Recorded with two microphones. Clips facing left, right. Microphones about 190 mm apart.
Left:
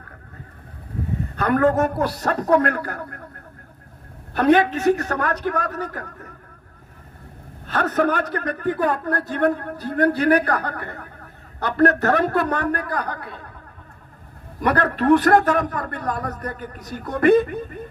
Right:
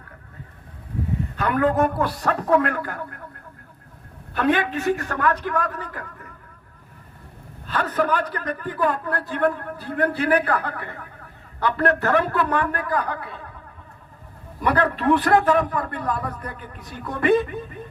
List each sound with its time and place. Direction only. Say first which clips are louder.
1.4 s a man's voice: left 2 dB; 45° left (ahead or behind)
4.4 s a man's voice: left 5 dB; 40° left (ahead or behind)
7.7 s a man's voice: left 2 dB; 45° left (ahead or behind)
14.6 s a man's voice: left 1 dB; 45° left (ahead or behind)